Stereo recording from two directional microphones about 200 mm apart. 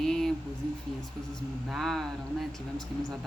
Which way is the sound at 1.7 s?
Centre (ahead or behind).